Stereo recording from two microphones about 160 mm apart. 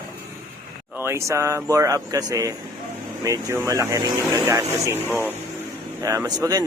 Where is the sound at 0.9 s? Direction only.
15° right (ahead or behind).